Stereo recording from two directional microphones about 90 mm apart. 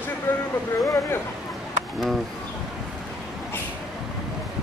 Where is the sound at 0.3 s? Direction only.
20° left (ahead or behind).